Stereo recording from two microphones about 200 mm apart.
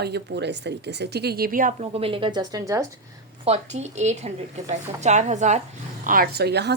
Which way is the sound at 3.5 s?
35° right (ahead or behind).